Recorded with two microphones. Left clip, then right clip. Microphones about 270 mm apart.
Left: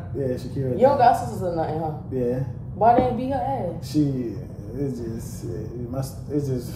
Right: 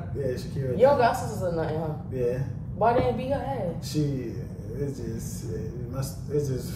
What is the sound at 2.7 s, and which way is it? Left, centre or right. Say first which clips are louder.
Speech: left 5 dB; centre.